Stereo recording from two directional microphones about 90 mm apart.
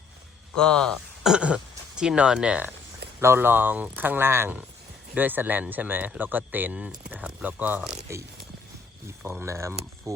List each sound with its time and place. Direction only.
0.6 s speech: 10° left (ahead or behind)
1.2 s speech: 10° right (ahead or behind)
3.2 s speech: 25° right (ahead or behind)
9.0 s speech: 30° right (ahead or behind)